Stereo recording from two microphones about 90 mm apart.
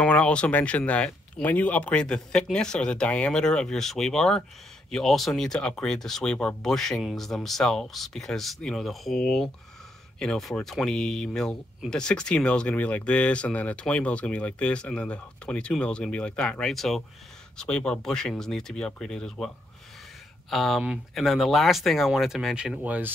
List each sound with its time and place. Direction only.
0.0 s speech: 15° left (ahead or behind); by 22.8 s 5° right (ahead or behind)
22.8 s speech: 20° right (ahead or behind)